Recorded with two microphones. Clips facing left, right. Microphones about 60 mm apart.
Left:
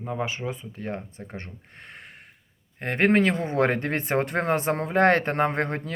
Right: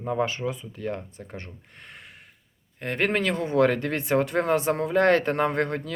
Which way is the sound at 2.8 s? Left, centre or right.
Left.